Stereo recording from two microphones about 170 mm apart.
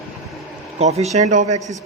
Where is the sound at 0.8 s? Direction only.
40° right (ahead or behind).